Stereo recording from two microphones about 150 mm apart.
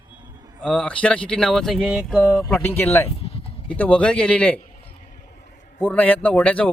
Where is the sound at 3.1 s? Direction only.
40° left (ahead or behind).